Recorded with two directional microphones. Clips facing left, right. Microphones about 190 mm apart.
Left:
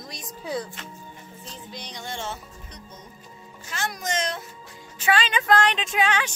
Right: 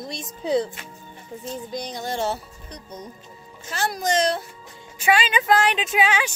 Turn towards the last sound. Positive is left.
turn(degrees=-10)  # may be behind; listen again after turning